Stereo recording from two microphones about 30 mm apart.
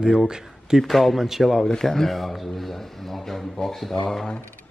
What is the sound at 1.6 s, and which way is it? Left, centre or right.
Speech, centre.